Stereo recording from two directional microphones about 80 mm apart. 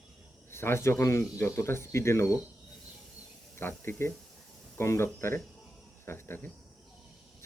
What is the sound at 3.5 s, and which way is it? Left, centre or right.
Speech, left.